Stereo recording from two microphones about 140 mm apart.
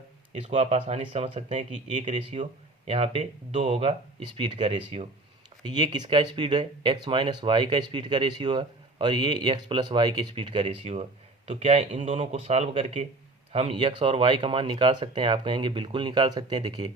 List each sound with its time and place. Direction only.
0.3 s speech: 50° right (ahead or behind)
2.1 s speech: 50° right (ahead or behind)
5.6 s speech: 30° right (ahead or behind); by 13.7 s 45° right (ahead or behind)
13.7 s speech: 35° right (ahead or behind)